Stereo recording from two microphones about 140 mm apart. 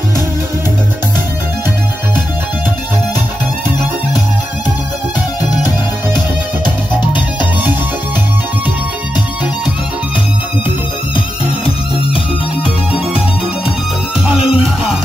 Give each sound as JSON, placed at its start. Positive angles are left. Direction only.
{"t": 11.1, "sound": "music", "side_deg": 40}
{"t": 14.4, "sound": "music", "side_deg": 40}